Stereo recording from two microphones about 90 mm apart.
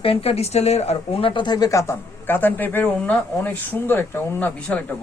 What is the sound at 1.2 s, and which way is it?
Speech, 60° left (ahead or behind).